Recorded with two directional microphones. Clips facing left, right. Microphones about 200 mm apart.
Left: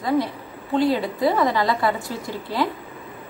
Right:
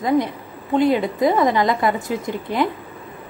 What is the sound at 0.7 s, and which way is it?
A woman's voice, 20° right (ahead or behind).